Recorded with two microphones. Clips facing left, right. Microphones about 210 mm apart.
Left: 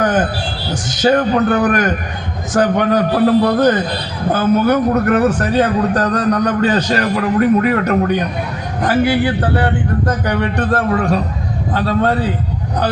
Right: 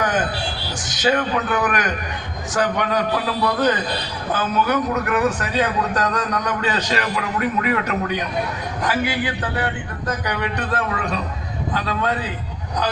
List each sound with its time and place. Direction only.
0.0 s music: 50° left (ahead or behind)
1.0 s a man's voice: 45° left (ahead or behind)